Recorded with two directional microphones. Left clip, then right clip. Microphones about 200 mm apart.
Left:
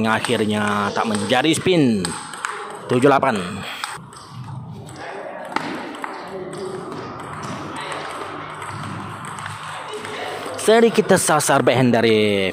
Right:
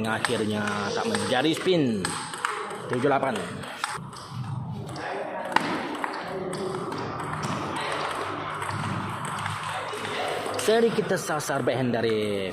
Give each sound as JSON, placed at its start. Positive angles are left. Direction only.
{"t": 0.0, "sound": "speech", "side_deg": 25}
{"t": 2.4, "sound": "a sound", "side_deg": 30}
{"t": 10.7, "sound": "speech", "side_deg": 25}